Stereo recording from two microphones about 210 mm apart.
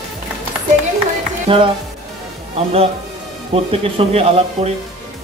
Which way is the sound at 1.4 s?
25° right (ahead or behind).